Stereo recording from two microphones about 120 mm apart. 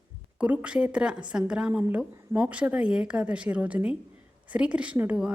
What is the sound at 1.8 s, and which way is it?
A woman's voice, 20° right (ahead or behind).